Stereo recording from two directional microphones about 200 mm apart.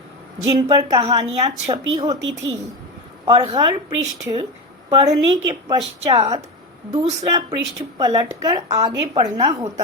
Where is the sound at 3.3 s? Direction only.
20° right (ahead or behind).